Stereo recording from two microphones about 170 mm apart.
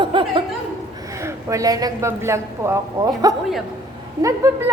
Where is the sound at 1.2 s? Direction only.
20° right (ahead or behind).